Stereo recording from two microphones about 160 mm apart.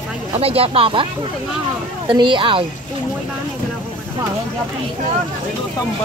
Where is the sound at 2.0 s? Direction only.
30° right (ahead or behind).